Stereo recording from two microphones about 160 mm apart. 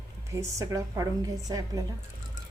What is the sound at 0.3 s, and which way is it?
A woman's voice, 20° right (ahead or behind).